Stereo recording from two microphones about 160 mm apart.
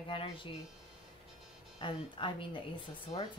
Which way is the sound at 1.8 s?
30° left (ahead or behind).